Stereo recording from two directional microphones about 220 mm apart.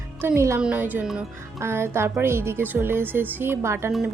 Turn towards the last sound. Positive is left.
turn(degrees=-10)  # may be behind; listen again after turning